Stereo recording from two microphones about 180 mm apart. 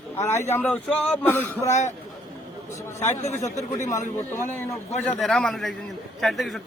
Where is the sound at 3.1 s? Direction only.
40° left (ahead or behind).